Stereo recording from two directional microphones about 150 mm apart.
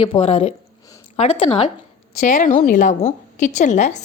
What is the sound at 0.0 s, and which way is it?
Speech, 40° left (ahead or behind).